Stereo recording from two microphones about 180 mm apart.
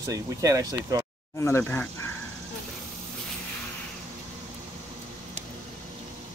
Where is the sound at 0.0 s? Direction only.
20° right (ahead or behind).